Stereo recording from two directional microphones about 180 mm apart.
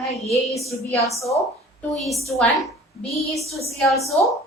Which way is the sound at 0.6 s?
15° left (ahead or behind).